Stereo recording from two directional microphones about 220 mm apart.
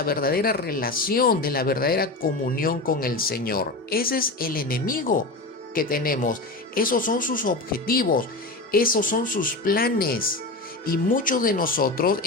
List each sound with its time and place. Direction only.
0.0 s speech: 45° left (ahead or behind)